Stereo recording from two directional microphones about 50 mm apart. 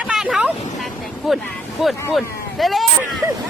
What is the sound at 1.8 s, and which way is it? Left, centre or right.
Speech, centre.